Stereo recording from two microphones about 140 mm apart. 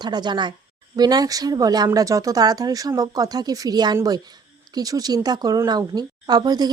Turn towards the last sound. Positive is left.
turn(degrees=-30)  # may be behind; listen again after turning